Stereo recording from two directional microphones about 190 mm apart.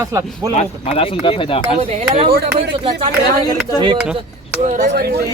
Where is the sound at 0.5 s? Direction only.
35° left (ahead or behind).